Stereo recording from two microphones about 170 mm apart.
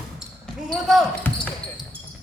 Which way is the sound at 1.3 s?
10° left (ahead or behind).